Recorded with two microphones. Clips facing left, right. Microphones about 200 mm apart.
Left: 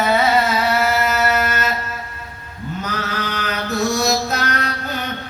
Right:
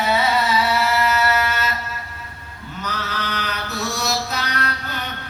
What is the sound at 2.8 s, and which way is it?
Mantra, 50° left (ahead or behind).